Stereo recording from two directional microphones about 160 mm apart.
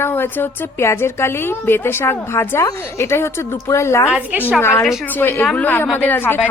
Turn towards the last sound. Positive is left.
turn(degrees=10)  # may be behind; listen again after turning